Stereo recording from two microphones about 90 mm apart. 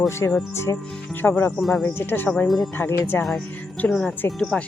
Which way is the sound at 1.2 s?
20° left (ahead or behind).